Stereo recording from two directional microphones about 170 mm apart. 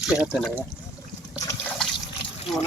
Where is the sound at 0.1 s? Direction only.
5° right (ahead or behind).